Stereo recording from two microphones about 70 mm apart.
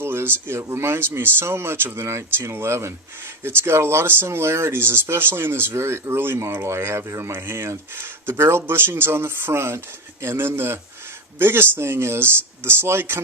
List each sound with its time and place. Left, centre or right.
0.0 s speech: right